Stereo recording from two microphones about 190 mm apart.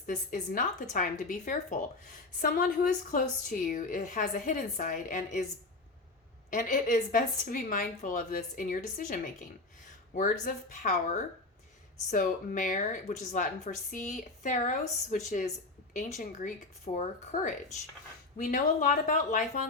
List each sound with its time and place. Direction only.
0.0 s speech: 45° left (ahead or behind)
6.5 s speech: 45° left (ahead or behind)